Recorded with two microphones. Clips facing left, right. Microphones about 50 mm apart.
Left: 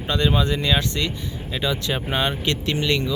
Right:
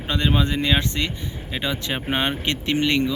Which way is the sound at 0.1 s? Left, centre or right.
Right.